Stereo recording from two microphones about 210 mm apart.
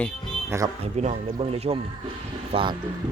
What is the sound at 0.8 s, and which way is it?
Speech, 30° right (ahead or behind).